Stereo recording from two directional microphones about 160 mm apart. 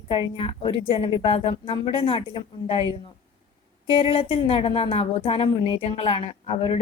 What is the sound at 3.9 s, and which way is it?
A woman's voice, 35° left (ahead or behind).